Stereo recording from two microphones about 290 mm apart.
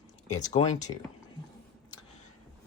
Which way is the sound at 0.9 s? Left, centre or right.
Centre.